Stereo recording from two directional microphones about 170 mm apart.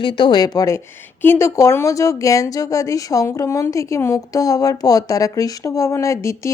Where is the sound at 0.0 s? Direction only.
30° left (ahead or behind).